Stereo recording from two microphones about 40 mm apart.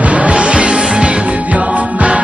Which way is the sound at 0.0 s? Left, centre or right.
Right.